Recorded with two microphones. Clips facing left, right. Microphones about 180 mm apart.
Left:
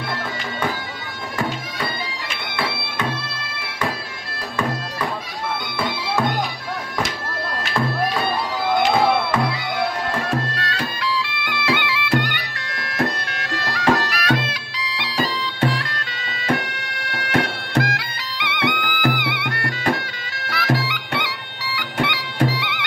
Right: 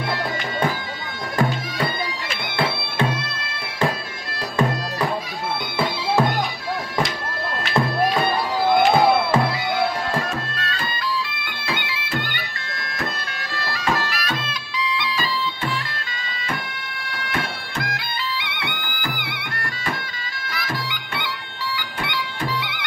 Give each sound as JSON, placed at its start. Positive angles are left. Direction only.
{"t": 10.3, "sound": "music", "side_deg": 70}